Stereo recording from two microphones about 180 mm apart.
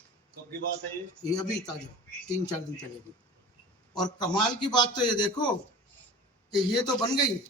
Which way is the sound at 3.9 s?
25° left (ahead or behind).